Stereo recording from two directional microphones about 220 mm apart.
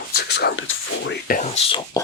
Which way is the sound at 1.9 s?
15° left (ahead or behind).